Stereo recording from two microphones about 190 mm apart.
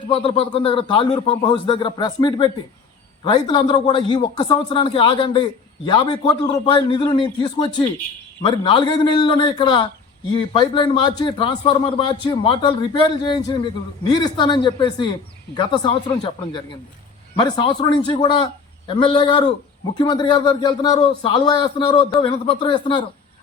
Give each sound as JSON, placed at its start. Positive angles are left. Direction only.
{"t": 0.1, "sound": "a man's voice", "side_deg": 30}